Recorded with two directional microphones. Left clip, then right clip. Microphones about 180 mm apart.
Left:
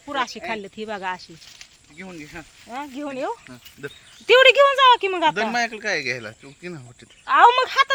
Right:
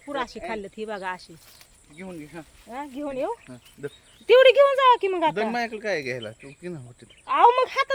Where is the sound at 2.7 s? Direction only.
35° left (ahead or behind).